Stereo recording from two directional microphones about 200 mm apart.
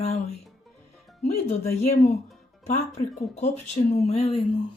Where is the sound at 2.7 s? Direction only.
35° left (ahead or behind).